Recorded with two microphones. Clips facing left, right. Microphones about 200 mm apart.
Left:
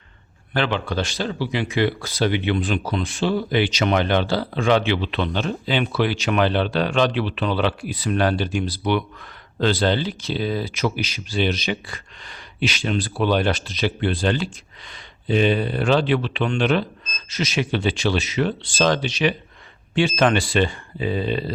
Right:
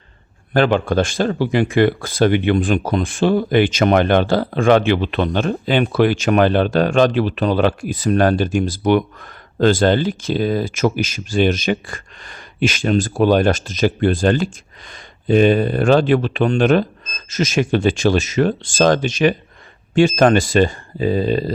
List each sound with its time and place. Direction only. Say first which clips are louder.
0.5 s speech: right 8 dB; 45° right (ahead or behind)